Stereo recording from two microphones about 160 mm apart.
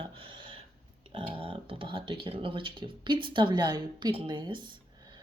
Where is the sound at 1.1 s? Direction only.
35° right (ahead or behind).